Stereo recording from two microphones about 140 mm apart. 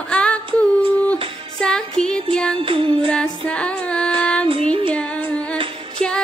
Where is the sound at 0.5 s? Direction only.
10° left (ahead or behind).